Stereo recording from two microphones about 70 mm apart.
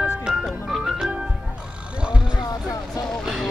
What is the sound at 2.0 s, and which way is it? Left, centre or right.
Vehicle, centre.